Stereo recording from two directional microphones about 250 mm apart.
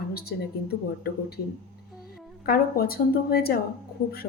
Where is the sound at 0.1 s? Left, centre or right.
Left.